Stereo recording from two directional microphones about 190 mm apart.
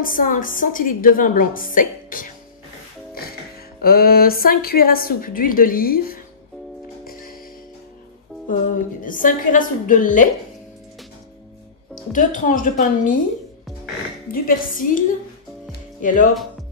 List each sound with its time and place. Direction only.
0.0 s a woman's voice: 45° left (ahead or behind)
3.8 s a woman's voice: 55° left (ahead or behind)
7.1 s music: 50° left (ahead or behind)
8.5 s a woman's voice: 45° left (ahead or behind)
12.1 s a woman's voice: 40° left (ahead or behind)
14.3 s a woman's voice: 50° left (ahead or behind)